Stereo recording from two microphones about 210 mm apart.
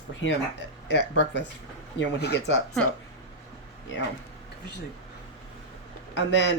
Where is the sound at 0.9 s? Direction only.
55° left (ahead or behind).